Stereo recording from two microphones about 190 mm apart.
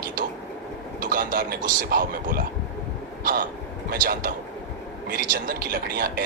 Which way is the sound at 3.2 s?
50° right (ahead or behind).